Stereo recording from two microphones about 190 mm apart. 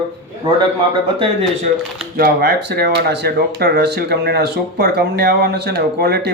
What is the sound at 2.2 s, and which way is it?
Speech, 55° right (ahead or behind).